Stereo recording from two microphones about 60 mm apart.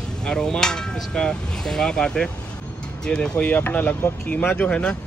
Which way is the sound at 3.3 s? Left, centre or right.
Left.